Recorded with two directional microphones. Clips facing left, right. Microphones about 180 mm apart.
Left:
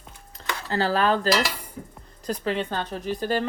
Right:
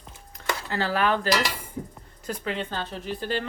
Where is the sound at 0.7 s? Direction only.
40° left (ahead or behind).